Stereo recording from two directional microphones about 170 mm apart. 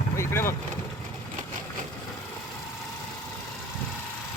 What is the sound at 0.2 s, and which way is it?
Vehicle, 15° left (ahead or behind).